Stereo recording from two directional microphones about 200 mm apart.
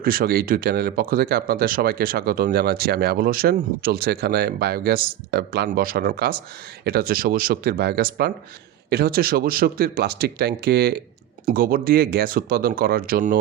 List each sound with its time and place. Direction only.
0.0 s speech: 45° right (ahead or behind)